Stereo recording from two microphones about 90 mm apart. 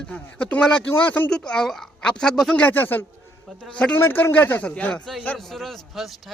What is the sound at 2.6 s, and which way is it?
Speech, 20° left (ahead or behind).